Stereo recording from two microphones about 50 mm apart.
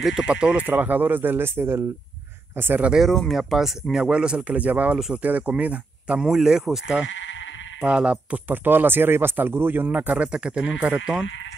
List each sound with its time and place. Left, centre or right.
0.2 s a man's voice: right
0.7 s speech: right
3.0 s speech: centre
3.9 s a man's voice: centre
6.3 s speech: centre
7.8 s a man's voice: right
8.5 s speech: right
9.8 s a man's voice: right